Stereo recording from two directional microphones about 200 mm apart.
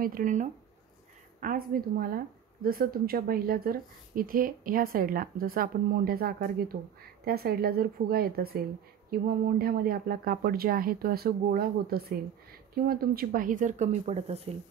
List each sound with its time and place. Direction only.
0.0 s speech: 45° right (ahead or behind)